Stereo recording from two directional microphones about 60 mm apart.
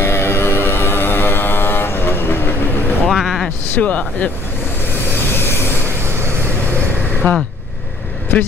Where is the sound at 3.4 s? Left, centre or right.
Left.